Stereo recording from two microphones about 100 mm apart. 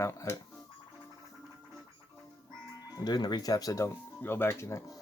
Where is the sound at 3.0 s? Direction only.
45° left (ahead or behind); by 4.9 s 30° left (ahead or behind).